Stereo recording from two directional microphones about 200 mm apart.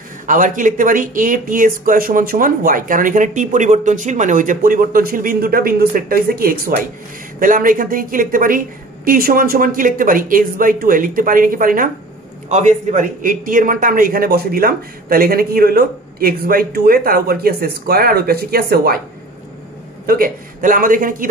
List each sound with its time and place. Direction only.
0.3 s a man's voice: 40° right (ahead or behind)
20.1 s a man's voice: 45° right (ahead or behind)